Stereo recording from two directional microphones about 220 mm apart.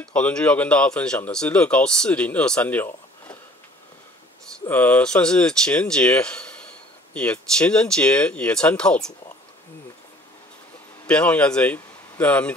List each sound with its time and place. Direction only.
0.0 s speech: 5° left (ahead or behind)
4.6 s speech: 10° left (ahead or behind)
11.1 s speech: 5° left (ahead or behind)